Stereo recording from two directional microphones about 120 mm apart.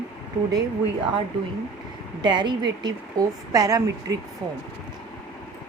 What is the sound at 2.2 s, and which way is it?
A woman's voice, 40° right (ahead or behind).